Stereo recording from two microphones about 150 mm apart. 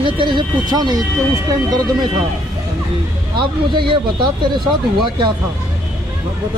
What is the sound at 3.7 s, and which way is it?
Speech, 35° right (ahead or behind).